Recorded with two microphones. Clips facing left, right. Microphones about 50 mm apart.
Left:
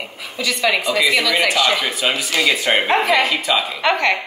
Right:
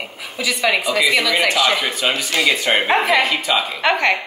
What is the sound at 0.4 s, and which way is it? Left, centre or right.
A woman's voice, centre.